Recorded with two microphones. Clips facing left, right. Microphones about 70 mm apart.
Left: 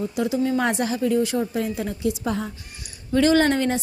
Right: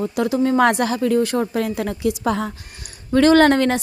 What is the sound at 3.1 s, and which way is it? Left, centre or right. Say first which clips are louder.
Speech: right 5 dB; right.